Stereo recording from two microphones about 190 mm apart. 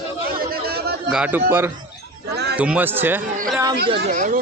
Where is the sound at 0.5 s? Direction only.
55° right (ahead or behind).